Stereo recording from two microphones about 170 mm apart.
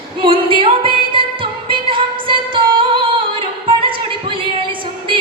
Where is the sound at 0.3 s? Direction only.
30° right (ahead or behind).